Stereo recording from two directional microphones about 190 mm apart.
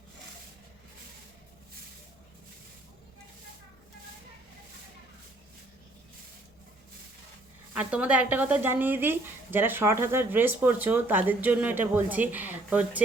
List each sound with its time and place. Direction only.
7.7 s speech: 5° right (ahead or behind)